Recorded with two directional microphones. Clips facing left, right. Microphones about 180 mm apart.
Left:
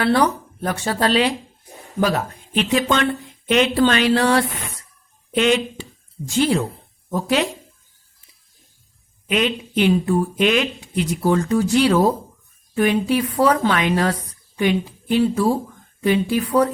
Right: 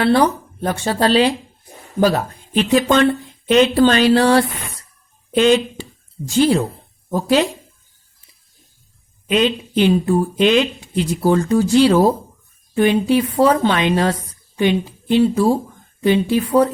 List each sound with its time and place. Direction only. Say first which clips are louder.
0.0 s speech: right 3 dB; 30° right (ahead or behind)
9.3 s speech: right 4 dB; 30° right (ahead or behind)